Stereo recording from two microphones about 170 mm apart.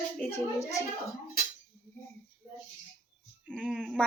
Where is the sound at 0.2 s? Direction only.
15° left (ahead or behind).